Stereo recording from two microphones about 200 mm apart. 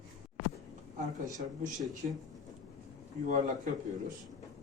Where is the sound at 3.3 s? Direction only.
40° right (ahead or behind).